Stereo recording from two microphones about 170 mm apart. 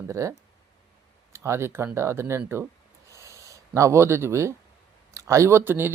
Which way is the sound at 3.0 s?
15° right (ahead or behind).